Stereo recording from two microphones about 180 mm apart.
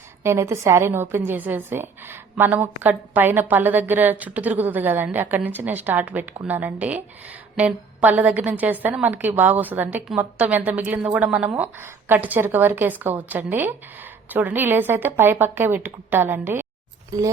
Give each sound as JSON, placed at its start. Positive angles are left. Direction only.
{"t": 0.2, "sound": "a woman's voice", "side_deg": -15}